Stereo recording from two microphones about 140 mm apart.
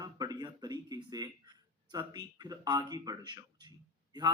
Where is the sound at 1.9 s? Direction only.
30° right (ahead or behind).